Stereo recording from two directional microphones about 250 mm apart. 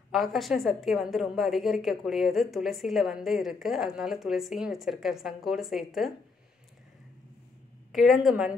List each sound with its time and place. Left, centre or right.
0.1 s a woman's voice: centre
7.9 s a woman's voice: centre